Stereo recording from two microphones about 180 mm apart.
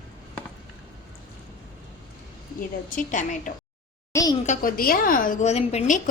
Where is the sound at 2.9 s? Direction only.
45° left (ahead or behind).